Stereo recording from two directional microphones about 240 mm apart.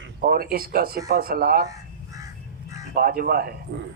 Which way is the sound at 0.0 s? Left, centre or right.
Right.